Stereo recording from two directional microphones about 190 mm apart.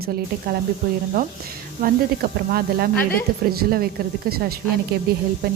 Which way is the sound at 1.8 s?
45° right (ahead or behind).